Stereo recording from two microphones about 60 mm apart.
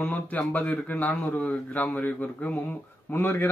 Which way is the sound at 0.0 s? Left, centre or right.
Left.